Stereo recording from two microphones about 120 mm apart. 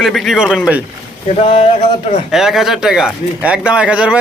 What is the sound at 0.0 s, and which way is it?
Speech, centre (ahead or behind).